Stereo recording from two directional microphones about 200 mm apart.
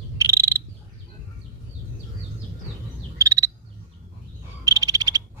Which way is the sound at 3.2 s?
15° right (ahead or behind).